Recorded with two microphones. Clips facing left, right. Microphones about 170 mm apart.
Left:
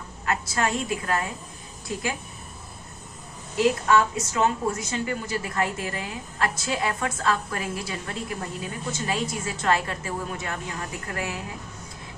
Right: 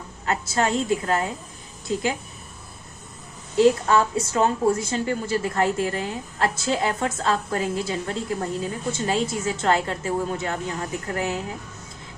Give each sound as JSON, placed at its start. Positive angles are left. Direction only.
{"t": 0.3, "sound": "a woman's voice", "side_deg": -30}
{"t": 3.6, "sound": "a woman's voice", "side_deg": -30}